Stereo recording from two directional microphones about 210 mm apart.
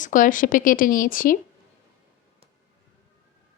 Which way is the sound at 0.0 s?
40° left (ahead or behind).